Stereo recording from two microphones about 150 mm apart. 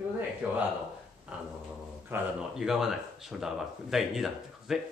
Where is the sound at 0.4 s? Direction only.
10° right (ahead or behind).